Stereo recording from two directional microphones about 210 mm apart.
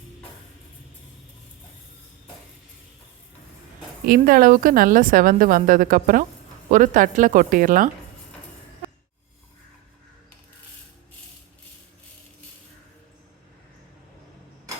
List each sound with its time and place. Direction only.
4.0 s a woman's voice: 45° right (ahead or behind)